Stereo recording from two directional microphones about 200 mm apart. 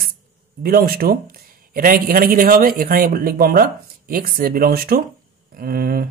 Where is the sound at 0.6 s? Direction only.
45° right (ahead or behind).